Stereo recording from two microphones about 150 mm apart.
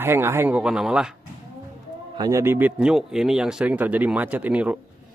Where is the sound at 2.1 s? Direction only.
20° right (ahead or behind).